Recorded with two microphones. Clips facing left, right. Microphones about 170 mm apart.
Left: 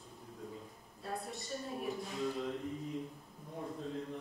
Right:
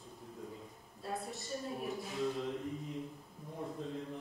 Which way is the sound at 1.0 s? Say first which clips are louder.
Right 1 dB; centre (ahead or behind).